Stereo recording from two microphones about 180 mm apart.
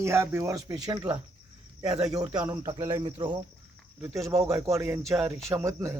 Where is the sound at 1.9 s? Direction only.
5° right (ahead or behind).